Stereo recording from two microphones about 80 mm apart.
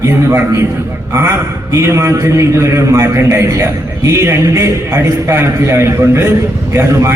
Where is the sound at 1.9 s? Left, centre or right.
Right.